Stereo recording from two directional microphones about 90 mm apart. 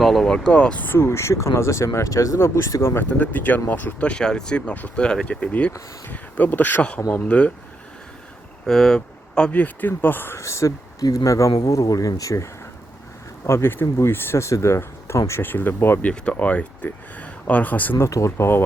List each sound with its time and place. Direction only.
0.0 s speech: 5° left (ahead or behind)
8.6 s speech: 5° left (ahead or behind); by 12.5 s 35° left (ahead or behind)
13.5 s speech: 25° left (ahead or behind)
18.0 s speech: 35° left (ahead or behind)